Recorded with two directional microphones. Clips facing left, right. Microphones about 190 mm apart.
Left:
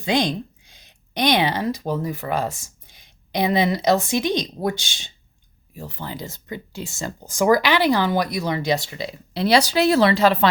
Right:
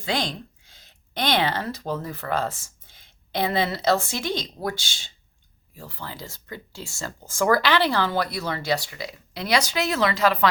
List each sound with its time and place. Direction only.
0.0 s speech: 20° left (ahead or behind)